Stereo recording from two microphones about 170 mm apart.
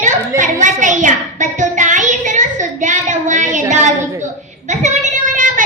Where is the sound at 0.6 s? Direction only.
50° right (ahead or behind).